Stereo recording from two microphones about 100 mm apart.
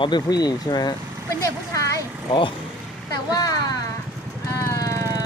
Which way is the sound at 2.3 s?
55° left (ahead or behind).